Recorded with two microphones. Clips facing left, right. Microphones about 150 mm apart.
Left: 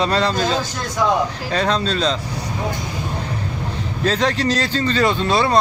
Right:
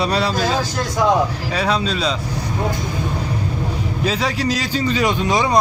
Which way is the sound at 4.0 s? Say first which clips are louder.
Left 3 dB; 10° right (ahead or behind).